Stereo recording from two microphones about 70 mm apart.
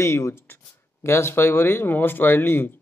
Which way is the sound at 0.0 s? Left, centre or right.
Left.